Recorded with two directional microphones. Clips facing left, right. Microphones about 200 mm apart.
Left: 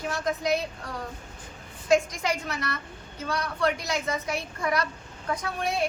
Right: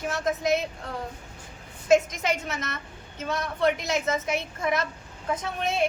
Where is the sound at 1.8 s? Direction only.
20° right (ahead or behind).